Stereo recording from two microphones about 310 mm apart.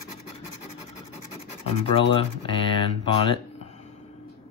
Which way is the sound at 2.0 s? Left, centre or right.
Centre.